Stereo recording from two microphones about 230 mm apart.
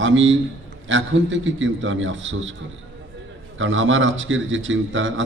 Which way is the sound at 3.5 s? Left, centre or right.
Right.